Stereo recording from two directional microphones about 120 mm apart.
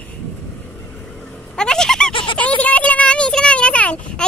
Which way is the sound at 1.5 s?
5° left (ahead or behind).